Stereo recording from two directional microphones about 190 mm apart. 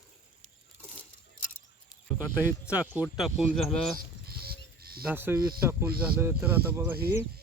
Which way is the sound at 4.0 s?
55° right (ahead or behind).